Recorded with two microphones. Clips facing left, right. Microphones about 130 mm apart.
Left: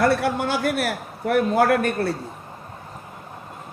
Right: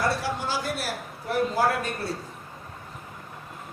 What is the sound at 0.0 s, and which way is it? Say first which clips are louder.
Speech: left 7 dB; 60° left (ahead or behind).